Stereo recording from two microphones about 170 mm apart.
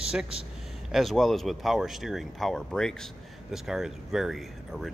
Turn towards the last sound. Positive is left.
turn(degrees=0)  # may be behind; listen again after turning